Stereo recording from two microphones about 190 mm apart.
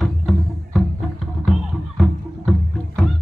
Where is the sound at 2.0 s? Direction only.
Centre (ahead or behind).